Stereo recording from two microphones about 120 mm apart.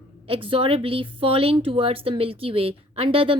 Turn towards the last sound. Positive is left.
turn(degrees=-50)  # may be behind; listen again after turning